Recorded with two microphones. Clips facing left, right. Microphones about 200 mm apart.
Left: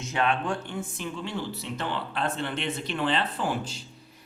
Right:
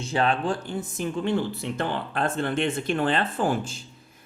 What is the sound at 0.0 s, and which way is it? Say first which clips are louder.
Speech: right 3 dB; 30° right (ahead or behind).